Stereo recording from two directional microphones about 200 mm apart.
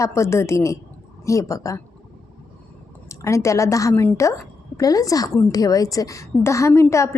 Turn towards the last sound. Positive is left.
turn(degrees=15)  # may be behind; listen again after turning